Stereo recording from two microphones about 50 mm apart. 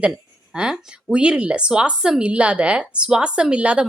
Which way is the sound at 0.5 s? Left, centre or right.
Centre.